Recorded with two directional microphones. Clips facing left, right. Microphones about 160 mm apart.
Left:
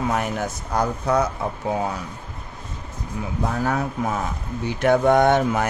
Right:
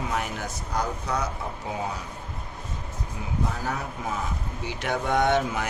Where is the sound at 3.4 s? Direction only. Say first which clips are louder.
Left 7 dB; 70° left (ahead or behind).